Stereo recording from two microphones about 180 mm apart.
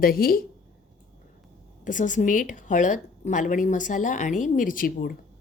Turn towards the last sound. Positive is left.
turn(degrees=55)  # may be behind; listen again after turning